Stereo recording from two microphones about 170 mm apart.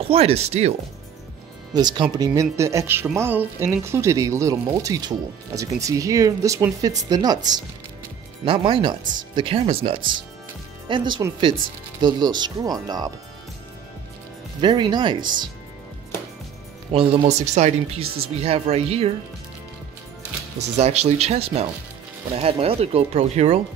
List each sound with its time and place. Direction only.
0.0 s speech: 35° right (ahead or behind)
1.7 s speech: 25° right (ahead or behind)
14.6 s speech: 25° right (ahead or behind)
16.9 s speech: 35° right (ahead or behind)
20.7 s speech: 40° right (ahead or behind)